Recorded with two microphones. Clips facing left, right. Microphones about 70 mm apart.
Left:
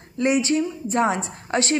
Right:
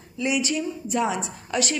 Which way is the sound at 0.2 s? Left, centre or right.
Left.